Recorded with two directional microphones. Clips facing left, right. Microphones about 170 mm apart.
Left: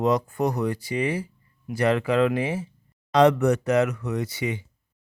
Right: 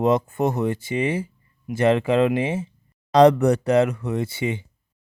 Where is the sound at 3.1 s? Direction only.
35° right (ahead or behind).